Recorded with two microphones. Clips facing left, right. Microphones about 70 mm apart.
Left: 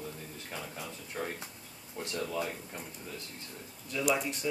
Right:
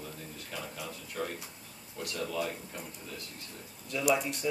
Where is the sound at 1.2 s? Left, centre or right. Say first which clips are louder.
Right 1 dB; left.